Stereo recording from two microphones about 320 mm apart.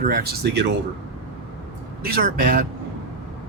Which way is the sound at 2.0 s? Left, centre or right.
Right.